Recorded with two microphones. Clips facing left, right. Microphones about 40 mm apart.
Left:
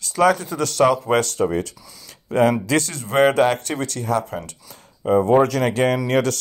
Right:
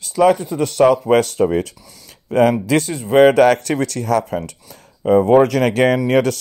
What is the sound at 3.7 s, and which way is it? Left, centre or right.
Speech, right.